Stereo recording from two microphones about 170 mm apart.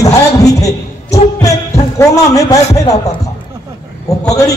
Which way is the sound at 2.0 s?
20° left (ahead or behind).